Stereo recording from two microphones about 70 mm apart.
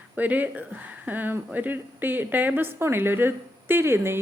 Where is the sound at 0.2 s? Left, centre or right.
Right.